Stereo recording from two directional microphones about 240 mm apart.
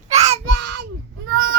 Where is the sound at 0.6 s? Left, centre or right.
Right.